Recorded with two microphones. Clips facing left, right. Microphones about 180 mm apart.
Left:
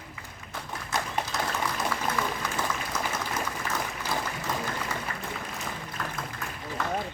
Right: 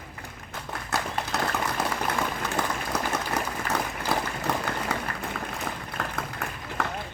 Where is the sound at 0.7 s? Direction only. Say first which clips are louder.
Right 2 dB; 65° right (ahead or behind).